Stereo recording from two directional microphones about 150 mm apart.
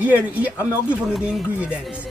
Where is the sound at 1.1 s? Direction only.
Centre (ahead or behind).